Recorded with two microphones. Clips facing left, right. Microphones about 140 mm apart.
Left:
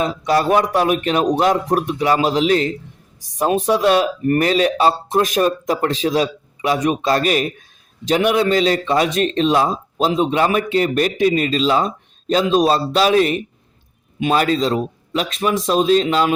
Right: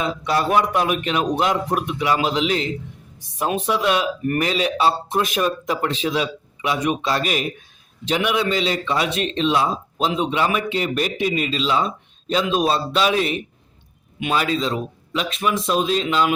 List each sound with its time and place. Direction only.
0.0 s a man's voice: 40° left (ahead or behind)